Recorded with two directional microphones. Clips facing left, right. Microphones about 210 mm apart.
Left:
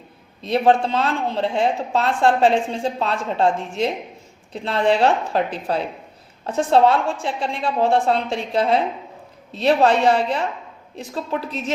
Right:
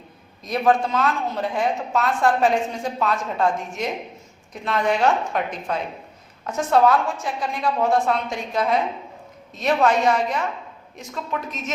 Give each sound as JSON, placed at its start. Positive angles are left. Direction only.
{"t": 0.4, "sound": "a woman's voice", "side_deg": 30}